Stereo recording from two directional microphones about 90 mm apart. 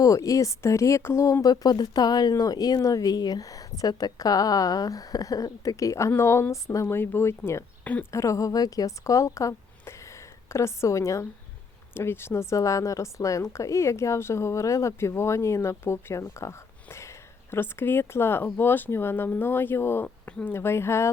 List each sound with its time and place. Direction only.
0.0 s a woman's voice: 40° left (ahead or behind)
20.1 s a sound: 15° left (ahead or behind)
20.5 s a woman's voice: 25° left (ahead or behind)